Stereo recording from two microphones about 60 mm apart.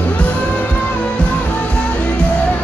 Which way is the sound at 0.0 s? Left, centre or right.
Left.